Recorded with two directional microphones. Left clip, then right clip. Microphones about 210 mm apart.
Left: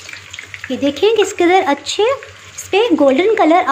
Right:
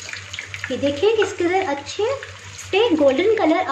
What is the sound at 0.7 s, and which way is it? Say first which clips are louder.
Speech: left 4 dB; 35° left (ahead or behind).